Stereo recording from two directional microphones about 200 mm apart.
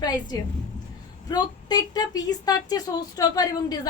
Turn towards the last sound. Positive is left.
turn(degrees=20)  # may be behind; listen again after turning